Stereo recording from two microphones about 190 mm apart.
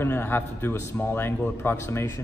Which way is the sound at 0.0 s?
10° left (ahead or behind).